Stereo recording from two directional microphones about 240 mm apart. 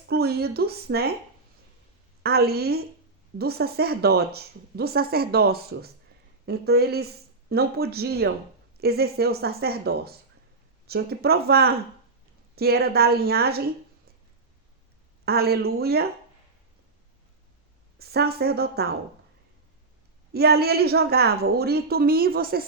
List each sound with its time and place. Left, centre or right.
0.1 s a woman's voice: right
2.2 s a woman's voice: right
15.2 s a woman's voice: right
17.9 s a woman's voice: right
20.3 s a woman's voice: right